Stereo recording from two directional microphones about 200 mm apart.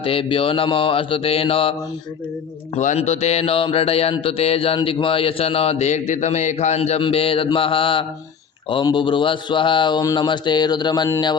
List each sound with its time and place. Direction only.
0.0 s mantra: 25° left (ahead or behind)
2.7 s mantra: 35° left (ahead or behind)